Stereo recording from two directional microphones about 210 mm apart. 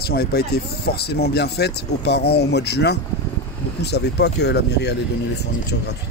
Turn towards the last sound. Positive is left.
turn(degrees=55)  # may be behind; listen again after turning